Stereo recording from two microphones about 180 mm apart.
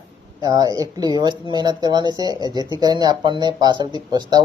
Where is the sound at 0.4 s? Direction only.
20° right (ahead or behind).